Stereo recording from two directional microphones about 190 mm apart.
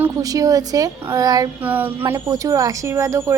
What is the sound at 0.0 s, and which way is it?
A woman's voice, 20° right (ahead or behind).